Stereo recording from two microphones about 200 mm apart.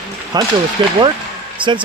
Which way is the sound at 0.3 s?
20° right (ahead or behind).